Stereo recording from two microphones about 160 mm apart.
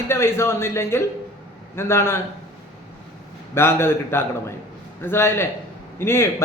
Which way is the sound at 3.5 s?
15° left (ahead or behind).